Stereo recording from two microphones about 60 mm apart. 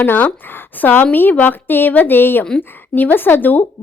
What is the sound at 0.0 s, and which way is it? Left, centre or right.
A woman's voice, left.